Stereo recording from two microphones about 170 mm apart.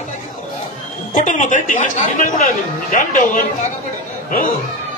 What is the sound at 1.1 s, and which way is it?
A woman's voice, 50° left (ahead or behind).